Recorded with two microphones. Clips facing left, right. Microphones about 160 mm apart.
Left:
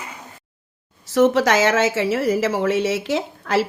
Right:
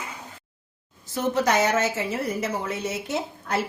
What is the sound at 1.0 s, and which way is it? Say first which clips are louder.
A woman's voice: left 8 dB; 90° left.